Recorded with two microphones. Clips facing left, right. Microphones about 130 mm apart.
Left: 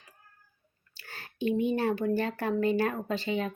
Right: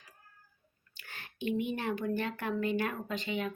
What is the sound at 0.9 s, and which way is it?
Speech, 35° left (ahead or behind).